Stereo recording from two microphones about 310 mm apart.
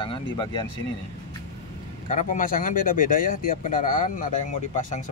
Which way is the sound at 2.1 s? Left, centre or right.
Left.